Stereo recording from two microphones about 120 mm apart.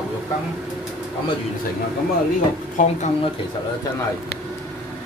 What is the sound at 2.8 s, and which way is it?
Speech, 90° left.